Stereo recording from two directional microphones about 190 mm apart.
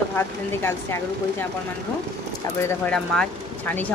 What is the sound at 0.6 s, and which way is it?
Speech, 10° left (ahead or behind).